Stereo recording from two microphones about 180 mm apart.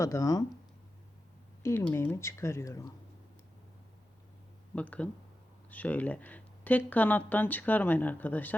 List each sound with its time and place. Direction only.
0.0 s speech: 20° left (ahead or behind)
1.6 s speech: 15° left (ahead or behind)
4.7 s speech: 5° left (ahead or behind)